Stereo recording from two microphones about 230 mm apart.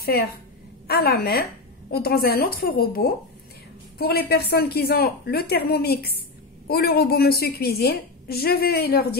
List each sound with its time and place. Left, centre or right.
0.0 s a woman's voice: left